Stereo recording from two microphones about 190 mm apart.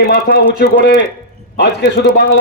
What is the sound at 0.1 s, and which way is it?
A man's voice, 60° left (ahead or behind).